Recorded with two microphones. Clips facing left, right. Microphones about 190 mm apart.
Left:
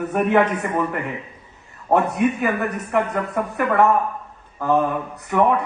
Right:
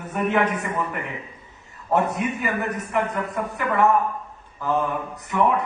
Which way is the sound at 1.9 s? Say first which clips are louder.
Left 4 dB; 65° left (ahead or behind).